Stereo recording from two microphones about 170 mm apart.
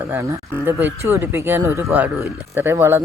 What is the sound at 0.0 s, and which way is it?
Speech, 15° right (ahead or behind).